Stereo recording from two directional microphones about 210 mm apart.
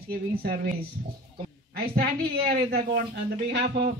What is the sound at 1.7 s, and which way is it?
A woman's voice, 45° right (ahead or behind).